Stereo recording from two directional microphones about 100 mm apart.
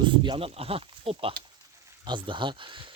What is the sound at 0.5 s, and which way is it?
Speech, 75° right (ahead or behind).